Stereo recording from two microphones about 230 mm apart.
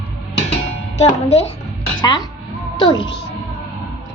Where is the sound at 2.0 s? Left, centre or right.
Centre.